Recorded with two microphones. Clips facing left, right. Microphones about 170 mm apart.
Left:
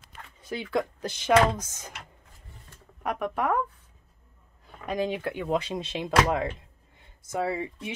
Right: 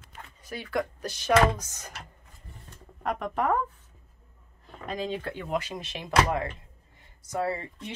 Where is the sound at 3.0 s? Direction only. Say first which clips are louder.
Even; 5° left (ahead or behind).